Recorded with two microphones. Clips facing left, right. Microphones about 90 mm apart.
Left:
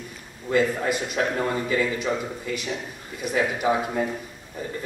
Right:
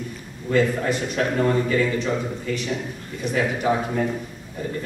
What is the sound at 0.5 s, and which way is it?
A man's voice, 5° left (ahead or behind).